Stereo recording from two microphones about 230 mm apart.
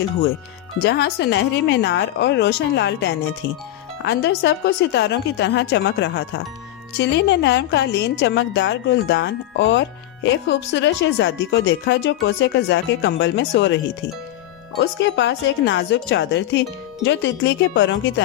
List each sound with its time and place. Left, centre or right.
0.8 s speech: left
14.8 s speech: left